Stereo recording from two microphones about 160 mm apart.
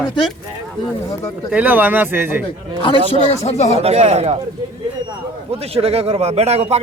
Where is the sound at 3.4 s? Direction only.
45° left (ahead or behind).